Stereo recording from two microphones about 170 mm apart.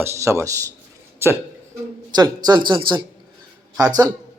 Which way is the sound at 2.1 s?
25° right (ahead or behind).